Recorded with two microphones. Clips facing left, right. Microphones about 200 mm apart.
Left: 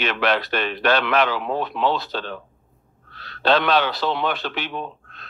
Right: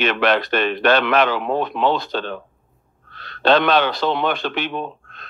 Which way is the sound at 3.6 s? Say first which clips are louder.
Right 3 dB; 55° right (ahead or behind).